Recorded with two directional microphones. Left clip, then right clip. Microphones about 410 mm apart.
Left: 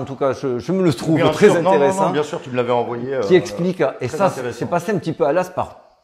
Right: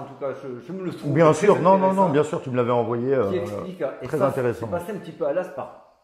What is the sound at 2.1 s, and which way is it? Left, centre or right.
A man's voice, centre.